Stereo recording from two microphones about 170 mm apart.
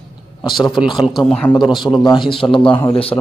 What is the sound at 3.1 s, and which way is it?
Speech, 15° left (ahead or behind).